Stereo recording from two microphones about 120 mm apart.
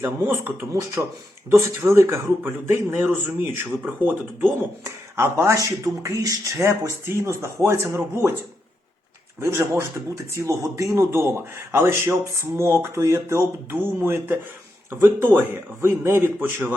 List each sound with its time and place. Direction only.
0.0 s speech: 20° right (ahead or behind)
9.4 s speech: 20° right (ahead or behind)